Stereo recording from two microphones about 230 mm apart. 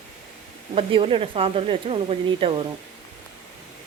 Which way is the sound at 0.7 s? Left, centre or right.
Right.